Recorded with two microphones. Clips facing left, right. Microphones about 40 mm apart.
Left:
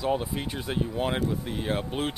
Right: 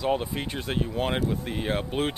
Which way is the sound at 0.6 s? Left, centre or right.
Centre.